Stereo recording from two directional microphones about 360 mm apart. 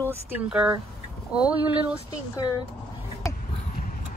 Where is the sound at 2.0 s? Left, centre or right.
Centre.